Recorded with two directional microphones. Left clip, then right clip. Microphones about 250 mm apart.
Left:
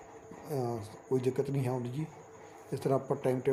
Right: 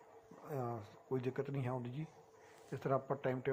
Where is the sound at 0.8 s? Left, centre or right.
Centre.